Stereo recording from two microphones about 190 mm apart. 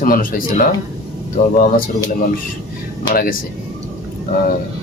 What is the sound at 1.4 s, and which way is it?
Speech, 50° left (ahead or behind).